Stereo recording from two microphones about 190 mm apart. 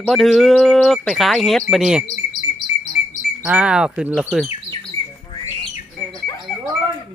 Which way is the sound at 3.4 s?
5° right (ahead or behind).